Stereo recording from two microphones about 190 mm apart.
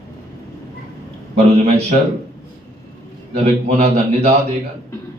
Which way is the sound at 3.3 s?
35° right (ahead or behind).